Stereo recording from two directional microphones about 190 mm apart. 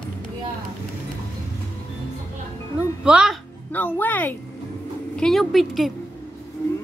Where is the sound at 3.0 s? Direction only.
5° right (ahead or behind).